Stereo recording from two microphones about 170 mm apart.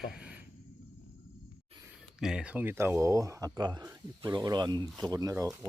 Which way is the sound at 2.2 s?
5° right (ahead or behind).